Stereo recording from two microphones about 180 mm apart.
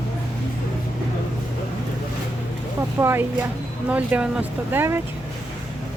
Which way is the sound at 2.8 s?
15° right (ahead or behind).